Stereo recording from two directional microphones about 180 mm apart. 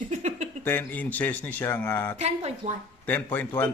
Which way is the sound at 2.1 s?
35° right (ahead or behind).